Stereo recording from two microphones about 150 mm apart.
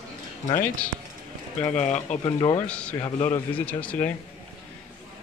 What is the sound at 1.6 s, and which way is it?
Speech, 50° left (ahead or behind).